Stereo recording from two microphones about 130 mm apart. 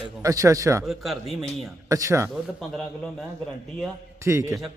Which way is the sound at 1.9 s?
25° right (ahead or behind).